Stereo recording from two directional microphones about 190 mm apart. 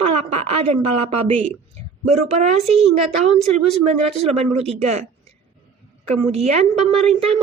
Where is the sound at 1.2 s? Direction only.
30° right (ahead or behind).